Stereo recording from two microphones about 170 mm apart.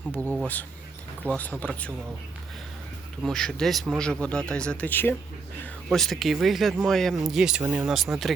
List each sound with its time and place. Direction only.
0.1 s speech: 15° right (ahead or behind)
1.3 s speech: 10° left (ahead or behind)
3.2 s speech: 5° left (ahead or behind)